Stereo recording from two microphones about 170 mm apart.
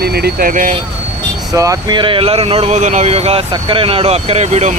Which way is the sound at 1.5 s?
20° right (ahead or behind).